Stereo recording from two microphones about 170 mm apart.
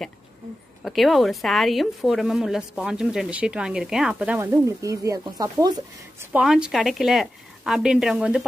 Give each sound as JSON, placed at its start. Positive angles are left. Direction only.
{"t": 0.8, "sound": "a woman's voice", "side_deg": 0}
{"t": 4.4, "sound": "speech", "side_deg": -20}
{"t": 6.3, "sound": "a woman's voice", "side_deg": -5}